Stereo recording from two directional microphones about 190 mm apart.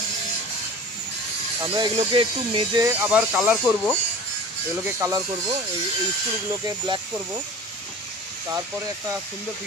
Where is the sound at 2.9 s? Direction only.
10° right (ahead or behind).